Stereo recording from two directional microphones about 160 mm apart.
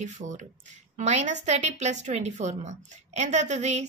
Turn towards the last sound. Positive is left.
turn(degrees=-45)  # may be behind; listen again after turning